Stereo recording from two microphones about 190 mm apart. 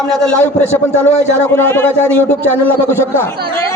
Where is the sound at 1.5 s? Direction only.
10° left (ahead or behind).